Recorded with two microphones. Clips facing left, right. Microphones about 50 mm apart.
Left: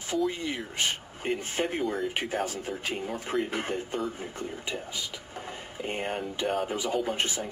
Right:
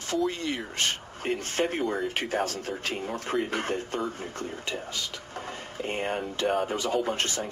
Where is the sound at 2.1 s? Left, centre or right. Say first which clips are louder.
Right 2 dB; centre.